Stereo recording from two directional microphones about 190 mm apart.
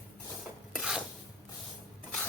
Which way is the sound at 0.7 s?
Centre (ahead or behind).